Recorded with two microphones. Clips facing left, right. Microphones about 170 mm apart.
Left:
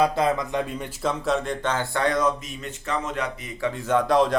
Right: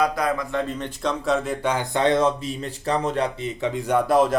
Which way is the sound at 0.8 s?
Centre (ahead or behind).